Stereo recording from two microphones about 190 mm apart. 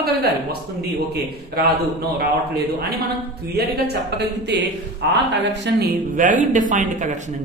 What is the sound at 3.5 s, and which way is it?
A woman's voice, 55° right (ahead or behind).